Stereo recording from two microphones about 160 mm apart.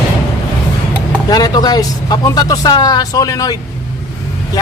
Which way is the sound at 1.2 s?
25° left (ahead or behind).